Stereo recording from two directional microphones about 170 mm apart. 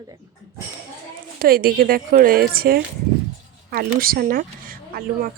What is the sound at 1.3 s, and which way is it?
Speech, 60° right (ahead or behind).